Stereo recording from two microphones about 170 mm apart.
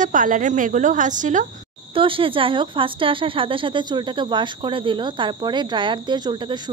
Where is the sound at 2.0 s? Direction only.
30° right (ahead or behind).